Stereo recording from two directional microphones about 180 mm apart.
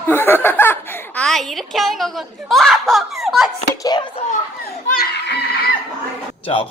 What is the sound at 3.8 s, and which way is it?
Speech, 25° left (ahead or behind).